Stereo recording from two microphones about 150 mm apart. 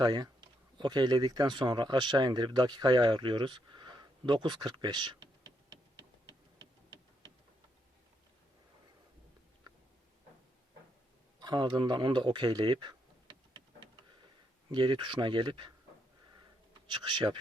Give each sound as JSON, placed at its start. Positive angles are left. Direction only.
{"t": 0.0, "sound": "speech", "side_deg": -25}
{"t": 11.3, "sound": "a sound", "side_deg": -30}
{"t": 14.7, "sound": "speech", "side_deg": -30}
{"t": 16.9, "sound": "speech", "side_deg": -30}